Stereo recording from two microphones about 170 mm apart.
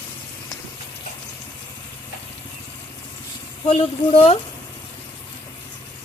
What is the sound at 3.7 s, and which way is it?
Speech, 35° left (ahead or behind).